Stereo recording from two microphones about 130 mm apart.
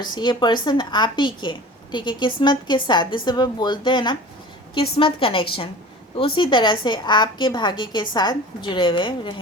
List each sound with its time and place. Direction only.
0.0 s a woman's voice: 35° left (ahead or behind)